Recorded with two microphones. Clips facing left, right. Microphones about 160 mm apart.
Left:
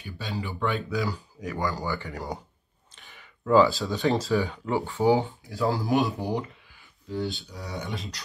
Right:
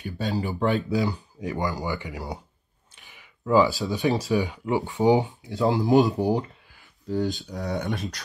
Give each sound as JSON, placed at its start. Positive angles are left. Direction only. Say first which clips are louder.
{"t": 0.0, "sound": "speech", "louder": "right 6 dB", "side_deg": -45}
{"t": 1.0, "sound": "speech", "louder": "right 3 dB", "side_deg": -25}
{"t": 2.1, "sound": "speech", "louder": "even", "side_deg": -5}
{"t": 7.1, "sound": "speech", "louder": "right 5 dB", "side_deg": -40}